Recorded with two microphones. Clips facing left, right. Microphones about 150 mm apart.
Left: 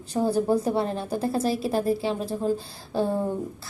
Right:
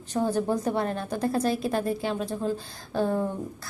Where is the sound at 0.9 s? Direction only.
Centre (ahead or behind).